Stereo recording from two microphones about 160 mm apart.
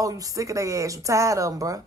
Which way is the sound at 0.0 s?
20° right (ahead or behind).